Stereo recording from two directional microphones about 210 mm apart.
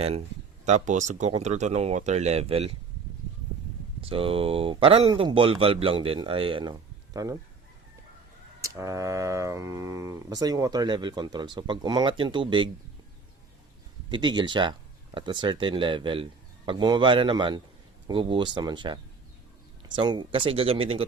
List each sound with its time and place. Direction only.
0.0 s speech: 30° right (ahead or behind)
4.0 s speech: 25° right (ahead or behind)
8.6 s speech: 15° right (ahead or behind)
14.1 s speech: 20° right (ahead or behind)
20.0 s speech: 20° right (ahead or behind)